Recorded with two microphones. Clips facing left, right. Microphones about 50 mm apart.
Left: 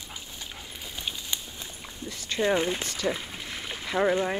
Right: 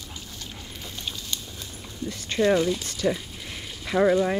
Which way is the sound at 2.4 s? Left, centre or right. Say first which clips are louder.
Right 4 dB; left.